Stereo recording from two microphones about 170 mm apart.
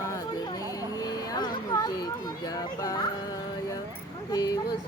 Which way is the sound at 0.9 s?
20° left (ahead or behind).